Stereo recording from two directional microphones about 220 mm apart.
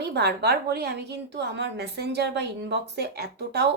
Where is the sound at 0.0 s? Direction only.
50° right (ahead or behind).